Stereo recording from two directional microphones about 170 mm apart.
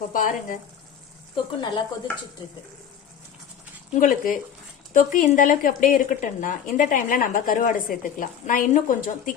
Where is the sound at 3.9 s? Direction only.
55° left (ahead or behind).